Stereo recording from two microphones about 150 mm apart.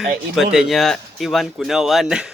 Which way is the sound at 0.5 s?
Centre (ahead or behind).